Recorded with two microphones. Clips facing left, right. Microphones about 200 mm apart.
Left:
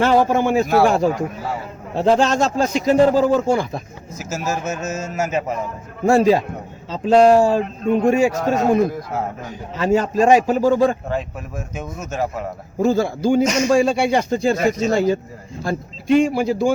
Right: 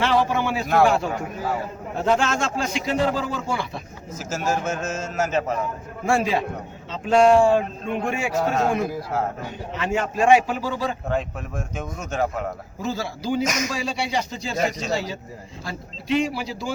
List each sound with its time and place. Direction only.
0.0 s speech: 45° left (ahead or behind)
4.2 s a man's voice: 10° left (ahead or behind)
6.1 s speech: 40° left (ahead or behind)
9.7 s speech: 40° left (ahead or behind)
11.1 s speech: 5° left (ahead or behind)
12.8 s speech: 50° left (ahead or behind)
13.4 s speech: 30° left (ahead or behind)
13.7 s speech: 50° left (ahead or behind)